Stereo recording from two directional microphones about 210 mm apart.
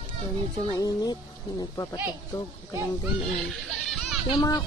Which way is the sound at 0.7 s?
15° left (ahead or behind).